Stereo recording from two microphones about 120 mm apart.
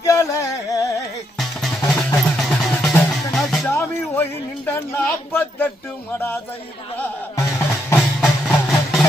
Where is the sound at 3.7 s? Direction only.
20° left (ahead or behind).